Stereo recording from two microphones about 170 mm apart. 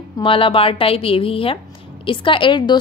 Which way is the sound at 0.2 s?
30° left (ahead or behind).